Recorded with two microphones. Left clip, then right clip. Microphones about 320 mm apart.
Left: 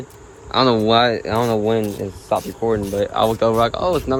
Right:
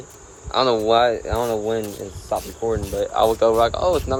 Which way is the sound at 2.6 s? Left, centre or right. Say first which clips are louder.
Left 3 dB; left.